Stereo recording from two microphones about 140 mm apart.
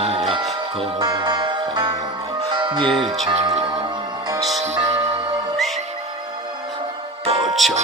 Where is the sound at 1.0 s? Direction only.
30° right (ahead or behind).